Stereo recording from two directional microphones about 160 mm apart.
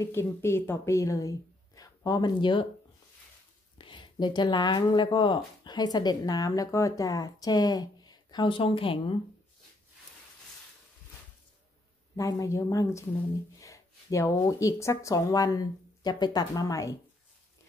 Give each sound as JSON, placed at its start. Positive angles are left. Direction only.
{"t": 0.0, "sound": "speech", "side_deg": 15}
{"t": 3.7, "sound": "speech", "side_deg": 30}
{"t": 12.2, "sound": "speech", "side_deg": 20}